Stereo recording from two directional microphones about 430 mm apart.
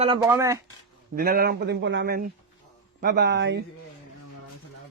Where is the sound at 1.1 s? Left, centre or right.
Right.